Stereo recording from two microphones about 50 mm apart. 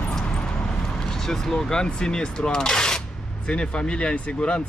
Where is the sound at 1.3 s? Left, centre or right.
Centre.